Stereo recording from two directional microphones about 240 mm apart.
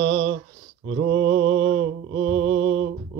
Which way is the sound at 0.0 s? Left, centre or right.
Right.